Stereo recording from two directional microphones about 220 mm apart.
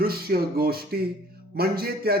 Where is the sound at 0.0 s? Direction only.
45° right (ahead or behind).